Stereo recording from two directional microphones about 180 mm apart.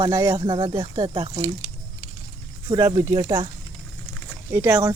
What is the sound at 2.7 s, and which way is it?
Speech, 20° right (ahead or behind).